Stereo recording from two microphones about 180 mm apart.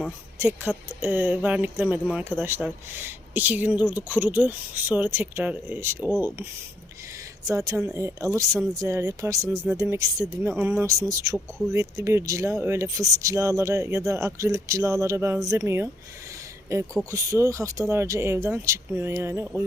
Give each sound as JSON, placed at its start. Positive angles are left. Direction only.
{"t": 0.3, "sound": "speech", "side_deg": -10}